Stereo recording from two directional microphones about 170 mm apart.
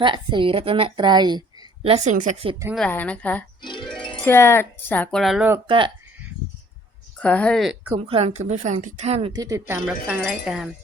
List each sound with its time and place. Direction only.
0.0 s a woman's voice: 30° right (ahead or behind)
2.1 s speech: 50° right (ahead or behind)
2.7 s speech: 5° left (ahead or behind)
3.6 s music: 25° left (ahead or behind)
4.2 s speech: 15° left (ahead or behind)
5.2 s speech: centre (ahead or behind)
5.6 s a woman's voice: 30° right (ahead or behind)
7.2 s speech: 5° left (ahead or behind)
7.9 s a woman's voice: 35° right (ahead or behind)
9.3 s speech: 20° right (ahead or behind)
10.1 s speech: 5° right (ahead or behind)